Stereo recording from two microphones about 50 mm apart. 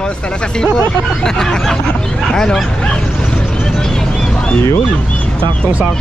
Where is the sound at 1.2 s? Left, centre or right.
Centre.